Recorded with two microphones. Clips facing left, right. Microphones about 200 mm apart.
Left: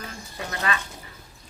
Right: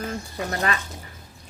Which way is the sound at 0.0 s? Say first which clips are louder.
Right 7 dB; 45° right (ahead or behind).